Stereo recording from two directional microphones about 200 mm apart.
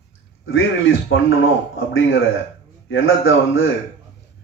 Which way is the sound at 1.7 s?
75° left (ahead or behind).